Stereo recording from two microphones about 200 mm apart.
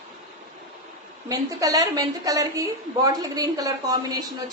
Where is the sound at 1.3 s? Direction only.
15° right (ahead or behind).